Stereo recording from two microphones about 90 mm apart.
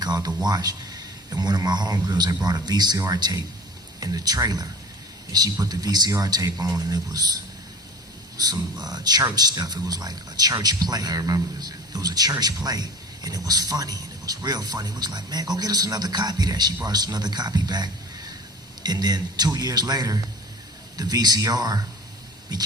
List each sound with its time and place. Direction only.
0.0 s a sound: 50° right (ahead or behind)
0.4 s a man's voice: 50° right (ahead or behind)
8.4 s a man's voice: 45° right (ahead or behind)